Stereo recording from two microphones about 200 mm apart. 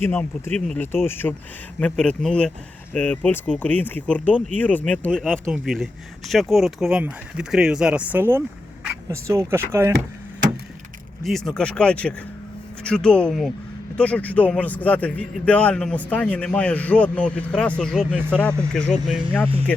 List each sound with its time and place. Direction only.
0.0 s a man's voice: 10° left (ahead or behind); by 9.9 s 10° right (ahead or behind)
11.2 s a man's voice: centre (ahead or behind)